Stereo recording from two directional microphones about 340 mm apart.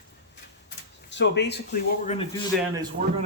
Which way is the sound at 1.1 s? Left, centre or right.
Left.